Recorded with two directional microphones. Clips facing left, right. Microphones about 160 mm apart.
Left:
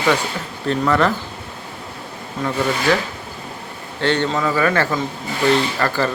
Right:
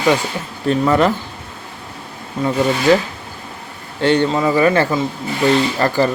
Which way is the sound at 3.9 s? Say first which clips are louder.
Right 4 dB; 15° right (ahead or behind).